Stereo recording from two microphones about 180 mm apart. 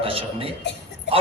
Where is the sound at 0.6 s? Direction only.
75° left (ahead or behind).